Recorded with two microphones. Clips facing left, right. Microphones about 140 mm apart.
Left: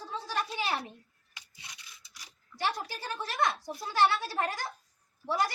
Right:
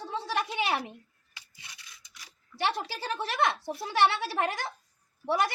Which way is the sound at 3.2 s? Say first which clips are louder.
Right 2 dB; 75° right (ahead or behind).